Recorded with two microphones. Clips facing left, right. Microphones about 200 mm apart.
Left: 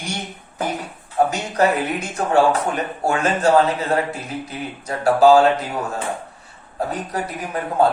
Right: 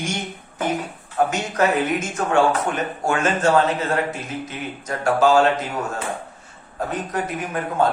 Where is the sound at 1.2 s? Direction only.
35° left (ahead or behind).